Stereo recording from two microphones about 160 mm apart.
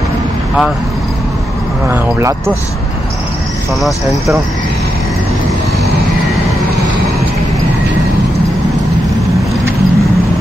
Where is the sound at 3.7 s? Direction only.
Centre (ahead or behind).